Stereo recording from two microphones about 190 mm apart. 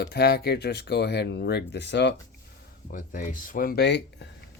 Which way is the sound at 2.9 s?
45° left (ahead or behind).